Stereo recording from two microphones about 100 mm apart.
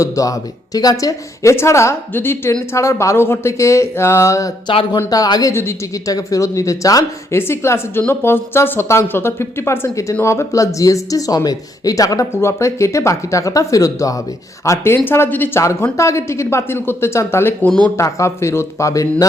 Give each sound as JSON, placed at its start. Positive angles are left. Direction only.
{"t": 0.0, "sound": "speech", "side_deg": 35}
{"t": 17.7, "sound": "speech", "side_deg": 10}
{"t": 17.9, "sound": "speech", "side_deg": 30}